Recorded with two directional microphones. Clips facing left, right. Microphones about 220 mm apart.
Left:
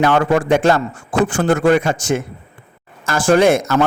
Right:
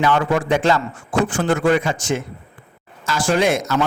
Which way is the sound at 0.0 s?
50° left (ahead or behind).